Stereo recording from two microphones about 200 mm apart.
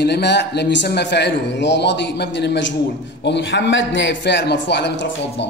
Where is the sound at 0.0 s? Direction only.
60° left (ahead or behind).